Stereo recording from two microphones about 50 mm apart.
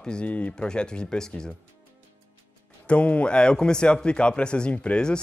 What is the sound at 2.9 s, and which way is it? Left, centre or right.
Speech, left.